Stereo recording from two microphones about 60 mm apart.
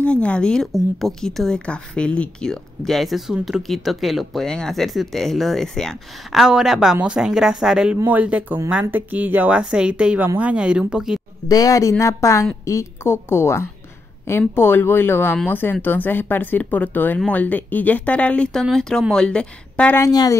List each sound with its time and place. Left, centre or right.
0.0 s speech: left
0.7 s a woman's voice: centre
4.5 s speech: centre
6.3 s speech: centre
8.0 s speech: right
9.6 s speech: centre
10.1 s speech: right
10.5 s speech: centre
11.4 s speech: left
12.0 s a woman's voice: left; by 19.9 s centre
20.1 s speech: left